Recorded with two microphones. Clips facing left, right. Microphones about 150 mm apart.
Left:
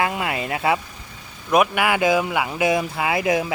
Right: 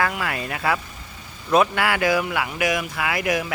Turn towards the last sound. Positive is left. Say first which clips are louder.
# left 3 dB
turn(degrees=25)  # may be behind; listen again after turning